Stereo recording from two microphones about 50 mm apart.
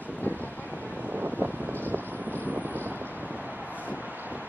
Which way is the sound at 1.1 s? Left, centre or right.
Right.